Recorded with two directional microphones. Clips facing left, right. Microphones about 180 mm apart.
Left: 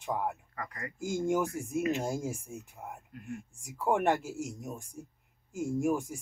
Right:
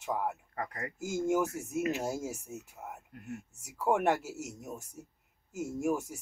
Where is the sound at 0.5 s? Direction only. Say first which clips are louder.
Right 3 dB; 50° right (ahead or behind).